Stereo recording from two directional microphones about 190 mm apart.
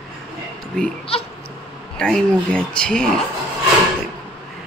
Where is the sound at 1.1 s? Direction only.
30° left (ahead or behind).